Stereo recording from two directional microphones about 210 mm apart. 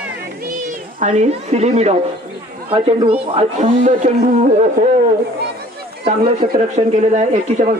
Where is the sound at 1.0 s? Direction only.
35° right (ahead or behind).